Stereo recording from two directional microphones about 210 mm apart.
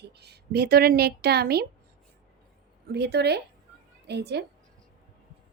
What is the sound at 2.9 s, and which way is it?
A woman's voice, 50° right (ahead or behind).